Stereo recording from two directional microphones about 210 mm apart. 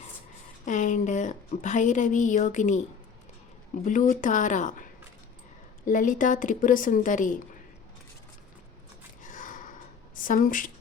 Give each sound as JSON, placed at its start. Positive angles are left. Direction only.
{"t": 0.6, "sound": "a woman's voice", "side_deg": 35}
{"t": 3.8, "sound": "a woman's voice", "side_deg": 40}
{"t": 9.2, "sound": "a sound", "side_deg": 40}
{"t": 10.2, "sound": "a woman's voice", "side_deg": 40}